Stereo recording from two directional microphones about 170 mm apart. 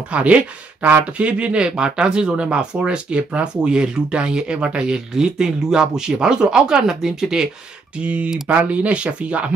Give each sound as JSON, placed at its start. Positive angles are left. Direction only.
{"t": 0.1, "sound": "speech", "side_deg": -5}